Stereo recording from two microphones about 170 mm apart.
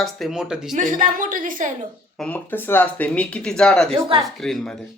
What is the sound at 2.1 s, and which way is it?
A woman's voice, 5° left (ahead or behind).